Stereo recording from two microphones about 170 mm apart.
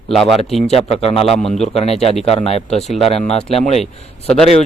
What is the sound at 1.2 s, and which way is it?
Speech, centre (ahead or behind).